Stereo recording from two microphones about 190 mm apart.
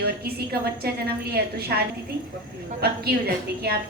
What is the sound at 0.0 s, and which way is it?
A woman's voice, 55° right (ahead or behind).